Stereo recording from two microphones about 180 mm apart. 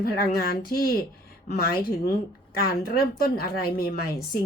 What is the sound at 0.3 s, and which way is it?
A woman's voice, 60° left (ahead or behind).